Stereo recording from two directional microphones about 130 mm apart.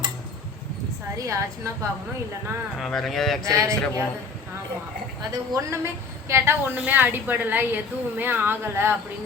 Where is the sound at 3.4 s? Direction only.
25° right (ahead or behind).